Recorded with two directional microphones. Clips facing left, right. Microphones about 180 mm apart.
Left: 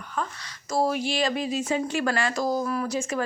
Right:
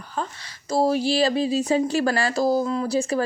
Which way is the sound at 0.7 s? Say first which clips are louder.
Right 4 dB; 30° right (ahead or behind).